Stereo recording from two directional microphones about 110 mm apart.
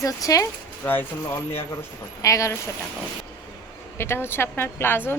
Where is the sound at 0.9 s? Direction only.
20° left (ahead or behind).